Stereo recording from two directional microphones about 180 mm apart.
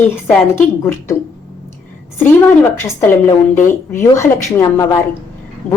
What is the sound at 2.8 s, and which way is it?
A woman's voice, 15° left (ahead or behind).